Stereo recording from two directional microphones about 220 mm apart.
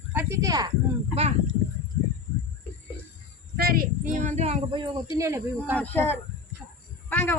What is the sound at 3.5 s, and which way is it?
A woman's voice, 45° right (ahead or behind).